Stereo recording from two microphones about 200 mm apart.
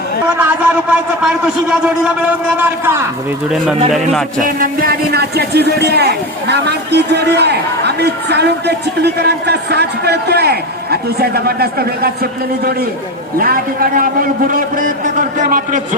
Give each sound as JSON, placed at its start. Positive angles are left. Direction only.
{"t": 0.3, "sound": "a man's voice", "side_deg": -10}
{"t": 3.9, "sound": "a man's voice", "side_deg": 0}
{"t": 4.4, "sound": "a man's voice", "side_deg": -45}
{"t": 13.4, "sound": "a man's voice", "side_deg": -45}